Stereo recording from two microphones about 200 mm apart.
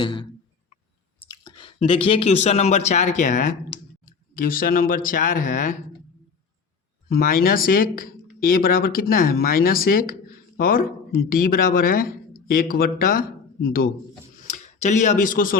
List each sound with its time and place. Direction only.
0.0 s a sound: 25° left (ahead or behind)
1.2 s speech: 20° left (ahead or behind); by 5.7 s 40° left (ahead or behind)
7.1 s speech: 45° left (ahead or behind)